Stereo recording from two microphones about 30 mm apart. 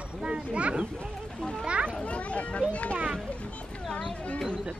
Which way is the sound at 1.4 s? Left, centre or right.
Left.